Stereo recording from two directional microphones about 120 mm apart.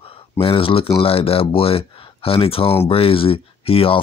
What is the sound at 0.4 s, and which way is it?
Speech, 50° left (ahead or behind).